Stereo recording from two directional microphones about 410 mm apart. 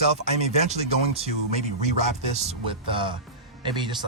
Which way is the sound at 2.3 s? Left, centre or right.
Centre.